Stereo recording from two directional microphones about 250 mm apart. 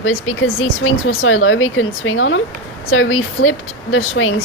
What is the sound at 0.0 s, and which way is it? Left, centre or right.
Speech, left.